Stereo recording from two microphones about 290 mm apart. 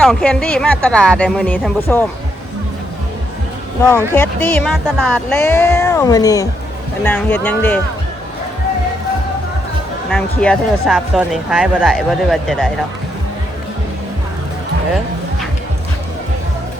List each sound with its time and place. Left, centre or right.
0.0 s speech: centre
3.8 s speech: centre
10.1 s speech: centre